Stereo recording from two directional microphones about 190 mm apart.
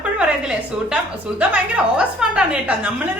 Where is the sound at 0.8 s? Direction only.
5° right (ahead or behind).